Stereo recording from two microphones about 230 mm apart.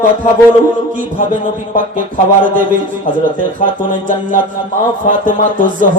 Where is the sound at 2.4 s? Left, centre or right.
Right.